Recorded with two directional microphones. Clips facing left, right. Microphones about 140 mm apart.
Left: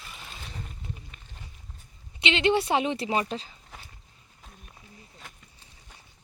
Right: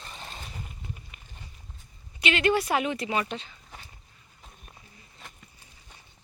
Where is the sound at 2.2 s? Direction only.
25° left (ahead or behind).